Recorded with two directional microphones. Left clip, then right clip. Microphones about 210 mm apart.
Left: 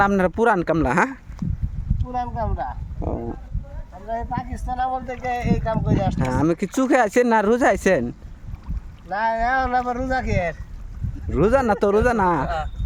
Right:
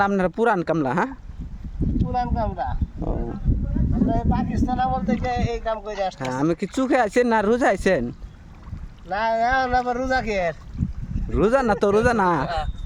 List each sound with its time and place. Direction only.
0.0 s speech: 10° left (ahead or behind)
2.0 s speech: centre (ahead or behind)
3.8 s a sound: 5° right (ahead or behind)
4.1 s speech: centre (ahead or behind)
6.3 s speech: 10° left (ahead or behind)
9.0 s speech: 10° right (ahead or behind)
11.3 s speech: 5° left (ahead or behind)